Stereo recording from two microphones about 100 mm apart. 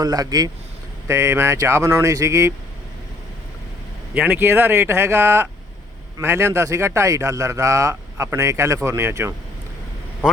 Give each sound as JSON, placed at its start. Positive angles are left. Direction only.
{"t": 0.0, "sound": "a man's voice", "side_deg": -40}
{"t": 1.0, "sound": "a man's voice", "side_deg": -25}
{"t": 4.1, "sound": "a man's voice", "side_deg": -15}